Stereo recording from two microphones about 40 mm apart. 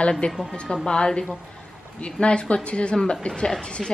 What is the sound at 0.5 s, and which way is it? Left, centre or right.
Speech, left.